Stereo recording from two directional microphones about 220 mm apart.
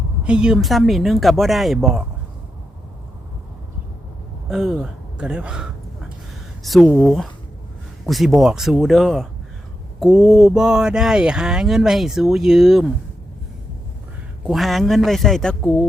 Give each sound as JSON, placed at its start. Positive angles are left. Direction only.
{"t": 0.2, "sound": "speech", "side_deg": -5}
{"t": 4.4, "sound": "speech", "side_deg": -5}
{"t": 14.4, "sound": "speech", "side_deg": 0}